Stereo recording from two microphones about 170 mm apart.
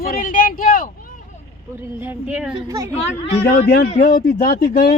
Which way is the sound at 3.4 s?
65° left (ahead or behind).